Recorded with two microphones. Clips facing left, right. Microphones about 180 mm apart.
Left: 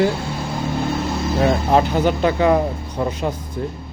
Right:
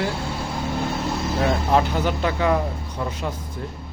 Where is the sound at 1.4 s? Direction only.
20° left (ahead or behind).